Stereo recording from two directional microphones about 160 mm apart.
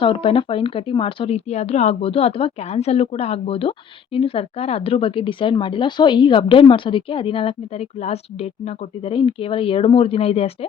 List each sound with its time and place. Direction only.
0.0 s a woman's voice: 35° left (ahead or behind)